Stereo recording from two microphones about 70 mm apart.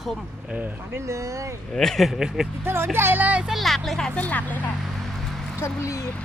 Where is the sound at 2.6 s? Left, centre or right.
Right.